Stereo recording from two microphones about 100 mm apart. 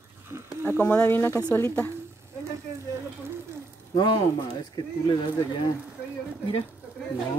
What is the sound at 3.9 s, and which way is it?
Speech, 45° left (ahead or behind).